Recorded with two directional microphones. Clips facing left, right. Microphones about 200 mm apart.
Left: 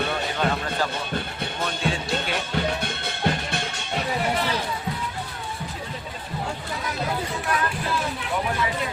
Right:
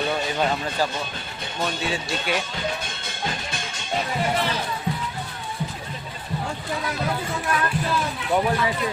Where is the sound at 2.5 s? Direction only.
60° left (ahead or behind).